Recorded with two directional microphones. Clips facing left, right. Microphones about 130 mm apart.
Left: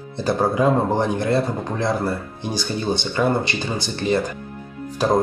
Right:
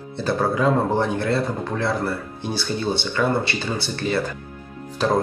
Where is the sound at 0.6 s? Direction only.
15° left (ahead or behind).